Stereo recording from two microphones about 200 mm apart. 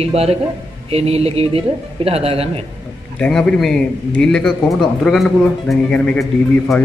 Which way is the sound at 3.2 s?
5° left (ahead or behind).